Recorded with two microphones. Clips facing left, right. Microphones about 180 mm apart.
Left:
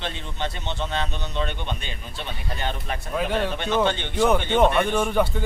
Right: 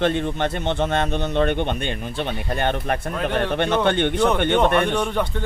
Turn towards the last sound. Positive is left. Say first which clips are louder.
# left 1 dB
turn(degrees=5)  # may be behind; listen again after turning